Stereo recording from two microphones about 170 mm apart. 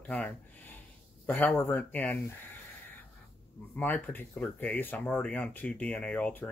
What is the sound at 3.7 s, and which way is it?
Speech, 10° left (ahead or behind).